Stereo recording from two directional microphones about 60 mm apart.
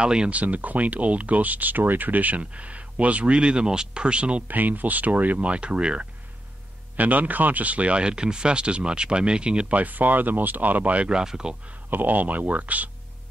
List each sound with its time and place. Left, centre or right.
0.0 s speech: centre
11.9 s speech: right